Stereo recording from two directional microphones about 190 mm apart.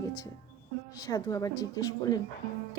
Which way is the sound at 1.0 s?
20° left (ahead or behind).